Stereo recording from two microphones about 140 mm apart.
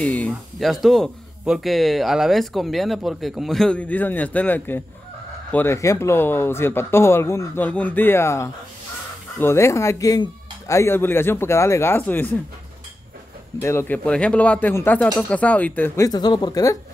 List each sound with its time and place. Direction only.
0.0 s speech: 10° left (ahead or behind)
13.6 s speech: 20° left (ahead or behind)
16.0 s speech: 30° left (ahead or behind)